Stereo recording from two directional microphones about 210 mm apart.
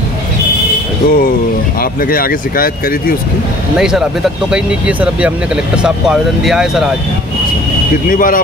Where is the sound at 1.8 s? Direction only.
45° left (ahead or behind).